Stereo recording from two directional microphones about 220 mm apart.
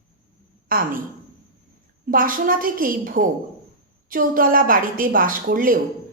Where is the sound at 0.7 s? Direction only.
40° right (ahead or behind).